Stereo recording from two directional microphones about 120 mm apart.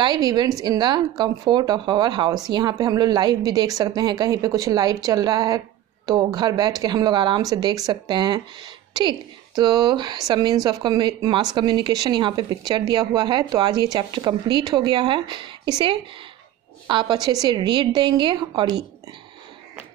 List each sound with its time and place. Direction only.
0.0 s a woman's voice: 35° right (ahead or behind)
16.8 s a woman's voice: 40° right (ahead or behind)